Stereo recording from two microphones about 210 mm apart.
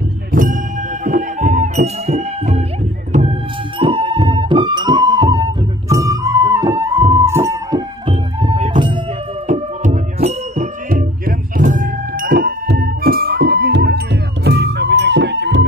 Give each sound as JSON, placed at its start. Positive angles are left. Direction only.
{"t": 0.3, "sound": "music", "side_deg": -40}
{"t": 8.1, "sound": "music", "side_deg": -25}
{"t": 9.5, "sound": "music", "side_deg": -35}